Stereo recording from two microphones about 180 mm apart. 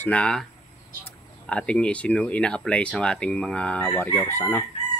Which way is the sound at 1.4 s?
5° left (ahead or behind).